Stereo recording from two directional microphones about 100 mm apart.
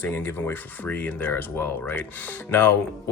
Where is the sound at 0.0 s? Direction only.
25° left (ahead or behind).